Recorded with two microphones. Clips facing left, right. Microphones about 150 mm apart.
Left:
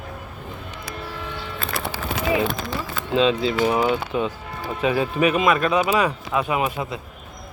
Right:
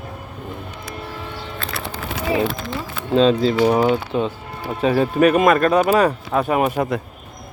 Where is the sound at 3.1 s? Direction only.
40° right (ahead or behind).